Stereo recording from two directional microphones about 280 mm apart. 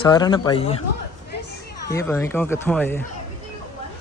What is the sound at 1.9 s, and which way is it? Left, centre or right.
A man's voice, centre.